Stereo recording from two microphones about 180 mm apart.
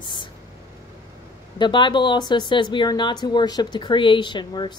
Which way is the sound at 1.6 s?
25° left (ahead or behind).